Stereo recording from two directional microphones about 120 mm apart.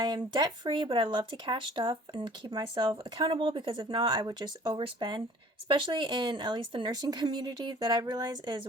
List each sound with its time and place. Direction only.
0.0 s speech: 35° right (ahead or behind)